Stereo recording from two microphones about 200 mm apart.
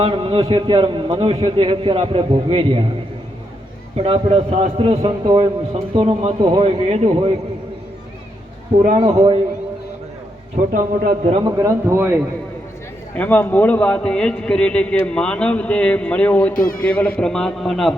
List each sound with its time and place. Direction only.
0.0 s a man's voice: 25° right (ahead or behind)
3.9 s a man's voice: 30° right (ahead or behind)
9.0 s a man's voice: 20° right (ahead or behind)
11.3 s speech: 20° right (ahead or behind)
13.1 s a man's voice: 10° left (ahead or behind)
16.6 s speech: 45° left (ahead or behind)
16.8 s a man's voice: 5° left (ahead or behind)